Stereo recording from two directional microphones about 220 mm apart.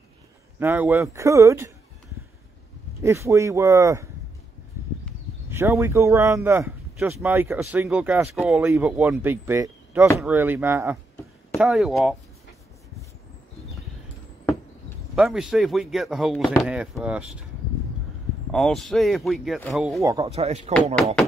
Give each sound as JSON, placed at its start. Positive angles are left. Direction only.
{"t": 0.6, "sound": "speech", "side_deg": -10}
{"t": 3.0, "sound": "speech", "side_deg": -10}
{"t": 5.5, "sound": "speech", "side_deg": -10}
{"t": 15.1, "sound": "speech", "side_deg": 0}
{"t": 18.5, "sound": "speech", "side_deg": 0}
{"t": 20.0, "sound": "speech", "side_deg": -15}
{"t": 20.2, "sound": "speech", "side_deg": -30}